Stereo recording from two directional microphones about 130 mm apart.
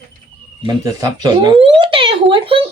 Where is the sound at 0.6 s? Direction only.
30° right (ahead or behind).